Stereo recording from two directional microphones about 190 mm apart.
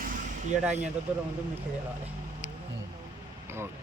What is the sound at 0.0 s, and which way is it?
Vehicle, 45° right (ahead or behind).